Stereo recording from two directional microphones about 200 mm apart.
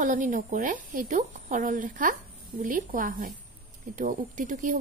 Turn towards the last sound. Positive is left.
turn(degrees=-40)  # may be behind; listen again after turning